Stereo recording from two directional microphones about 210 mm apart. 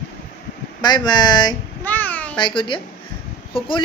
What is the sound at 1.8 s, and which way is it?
Speech, 10° left (ahead or behind).